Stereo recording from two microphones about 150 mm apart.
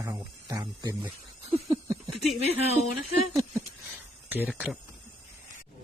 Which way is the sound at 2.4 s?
45° left (ahead or behind).